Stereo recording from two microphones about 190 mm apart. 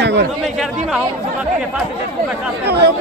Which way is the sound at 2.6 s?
60° right (ahead or behind).